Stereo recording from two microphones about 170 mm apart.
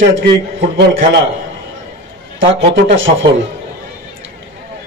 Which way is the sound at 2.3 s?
90° right.